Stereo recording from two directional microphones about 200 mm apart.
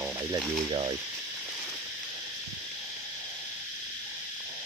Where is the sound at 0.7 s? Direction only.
25° right (ahead or behind).